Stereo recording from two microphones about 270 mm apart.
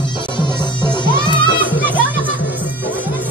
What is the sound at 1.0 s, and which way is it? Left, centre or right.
Music, centre.